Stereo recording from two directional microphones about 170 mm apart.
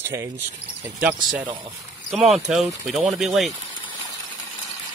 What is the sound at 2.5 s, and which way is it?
Speech, 5° right (ahead or behind).